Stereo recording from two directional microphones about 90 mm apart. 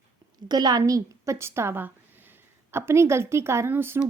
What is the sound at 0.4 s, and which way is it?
A woman's voice, 50° right (ahead or behind).